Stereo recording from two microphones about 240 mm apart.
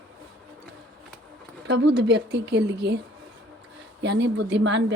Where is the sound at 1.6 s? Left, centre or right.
Right.